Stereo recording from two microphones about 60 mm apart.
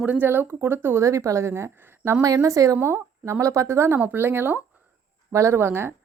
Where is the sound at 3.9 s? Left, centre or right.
Right.